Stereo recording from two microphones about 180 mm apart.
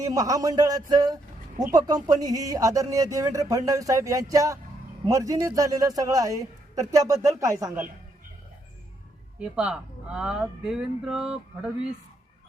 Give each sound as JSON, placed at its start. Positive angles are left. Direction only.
{"t": 0.0, "sound": "a man's voice", "side_deg": -20}
{"t": 9.4, "sound": "speech", "side_deg": -5}